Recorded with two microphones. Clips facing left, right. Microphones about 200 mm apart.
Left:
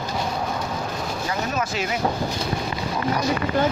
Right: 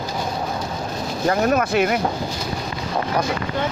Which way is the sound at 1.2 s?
60° right (ahead or behind).